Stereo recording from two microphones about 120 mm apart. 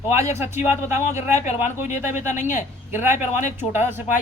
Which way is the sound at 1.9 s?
90° left.